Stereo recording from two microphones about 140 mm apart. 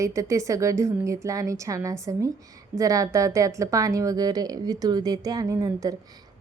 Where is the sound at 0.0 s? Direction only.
20° right (ahead or behind).